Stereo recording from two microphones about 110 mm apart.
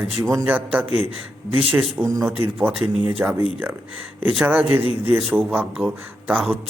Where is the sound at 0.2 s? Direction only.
25° right (ahead or behind).